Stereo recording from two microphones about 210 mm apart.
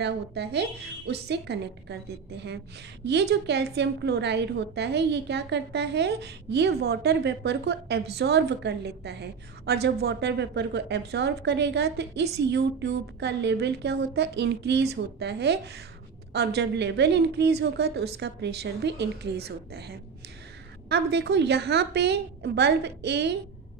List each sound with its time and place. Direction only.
0.0 s a woman's voice: 55° right (ahead or behind)